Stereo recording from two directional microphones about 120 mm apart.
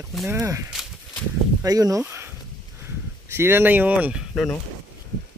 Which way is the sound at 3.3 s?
20° right (ahead or behind).